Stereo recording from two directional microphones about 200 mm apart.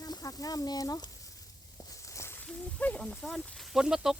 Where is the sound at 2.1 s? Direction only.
15° left (ahead or behind); by 4.1 s 5° right (ahead or behind).